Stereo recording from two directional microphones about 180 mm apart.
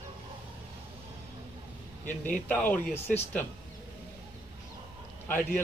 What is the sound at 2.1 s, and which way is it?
Speech, 10° left (ahead or behind).